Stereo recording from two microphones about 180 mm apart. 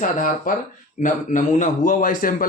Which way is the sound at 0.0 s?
45° left (ahead or behind).